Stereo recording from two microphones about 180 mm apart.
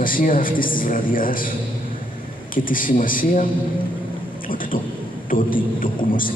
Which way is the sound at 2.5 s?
50° left (ahead or behind).